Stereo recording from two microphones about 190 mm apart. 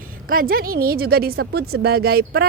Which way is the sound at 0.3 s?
50° right (ahead or behind).